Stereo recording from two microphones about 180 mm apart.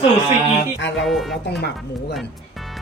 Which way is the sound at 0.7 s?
80° left.